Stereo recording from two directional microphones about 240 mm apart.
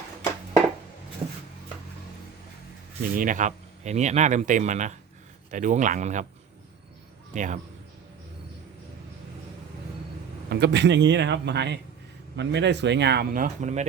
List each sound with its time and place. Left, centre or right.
3.0 s speech: right
7.3 s speech: right
10.5 s speech: right